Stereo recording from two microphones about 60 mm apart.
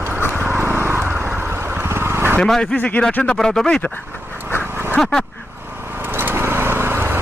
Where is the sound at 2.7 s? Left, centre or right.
Left.